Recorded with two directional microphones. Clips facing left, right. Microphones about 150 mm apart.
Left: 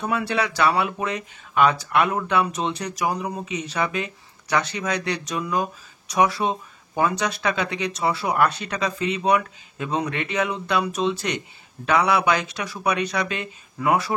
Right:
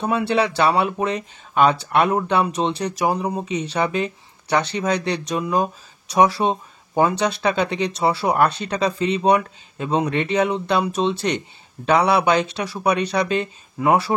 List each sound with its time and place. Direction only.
0.0 s speech: 25° right (ahead or behind)